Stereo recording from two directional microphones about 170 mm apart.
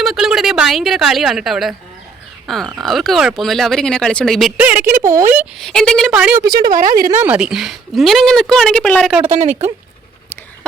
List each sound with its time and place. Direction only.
0.0 s speech: centre (ahead or behind)
5.5 s speech: 5° left (ahead or behind)
6.4 s a woman's voice: 25° right (ahead or behind)
6.7 s speech: 55° right (ahead or behind)
7.2 s speech: 10° right (ahead or behind)
9.3 s speech: 40° right (ahead or behind)